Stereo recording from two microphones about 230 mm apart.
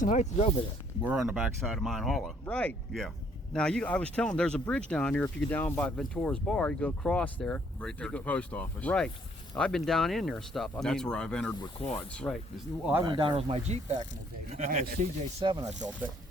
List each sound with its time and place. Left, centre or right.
0.0 s speech: left
1.0 s speech: centre
12.8 s speech: centre
13.1 s speech: right
15.4 s speech: centre